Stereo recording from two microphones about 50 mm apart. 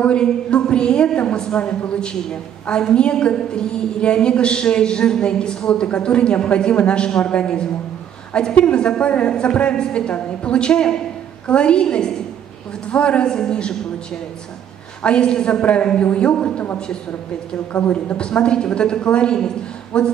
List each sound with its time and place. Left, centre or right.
0.0 s a woman's voice: centre
15.0 s a man's voice: centre
17.7 s a woman's voice: left
18.1 s a woman's voice: centre